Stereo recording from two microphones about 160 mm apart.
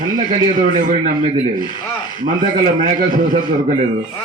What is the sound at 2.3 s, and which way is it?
A man's voice, 55° right (ahead or behind).